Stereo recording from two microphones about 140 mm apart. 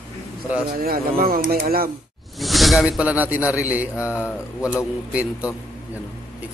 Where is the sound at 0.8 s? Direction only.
90° right.